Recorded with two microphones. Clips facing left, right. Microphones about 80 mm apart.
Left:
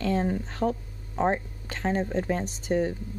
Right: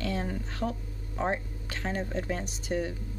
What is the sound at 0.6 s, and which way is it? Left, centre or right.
Speech, left.